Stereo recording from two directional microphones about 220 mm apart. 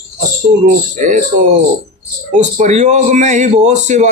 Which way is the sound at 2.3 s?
35° right (ahead or behind).